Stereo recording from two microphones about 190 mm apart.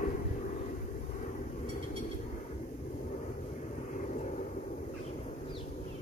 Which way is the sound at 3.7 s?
40° left (ahead or behind).